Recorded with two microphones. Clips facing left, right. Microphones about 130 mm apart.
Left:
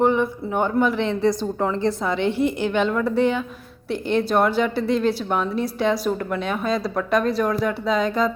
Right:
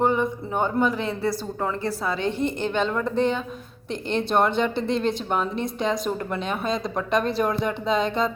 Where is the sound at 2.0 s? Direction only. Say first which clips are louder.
Left 4 dB; 15° left (ahead or behind).